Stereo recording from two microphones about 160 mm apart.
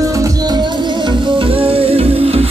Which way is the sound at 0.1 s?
20° right (ahead or behind).